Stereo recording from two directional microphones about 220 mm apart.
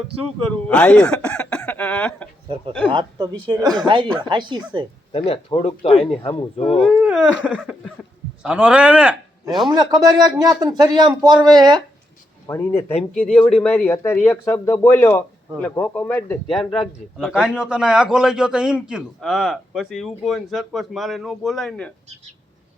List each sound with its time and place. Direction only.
0.5 s speech: 5° left (ahead or behind)
2.9 s speech: 20° right (ahead or behind)
5.1 s speech: 25° left (ahead or behind)
6.8 s a man's voice: 5° right (ahead or behind)
9.6 s a man's voice: 20° right (ahead or behind)
12.5 s a man's voice: 15° left (ahead or behind)